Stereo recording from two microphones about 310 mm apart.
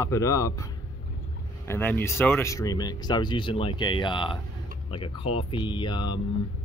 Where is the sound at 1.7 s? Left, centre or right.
Centre.